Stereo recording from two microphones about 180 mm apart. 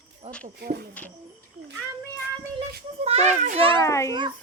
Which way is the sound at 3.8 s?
15° left (ahead or behind).